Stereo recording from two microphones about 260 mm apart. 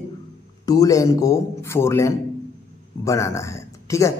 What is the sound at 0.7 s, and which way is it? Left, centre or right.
Speech, centre.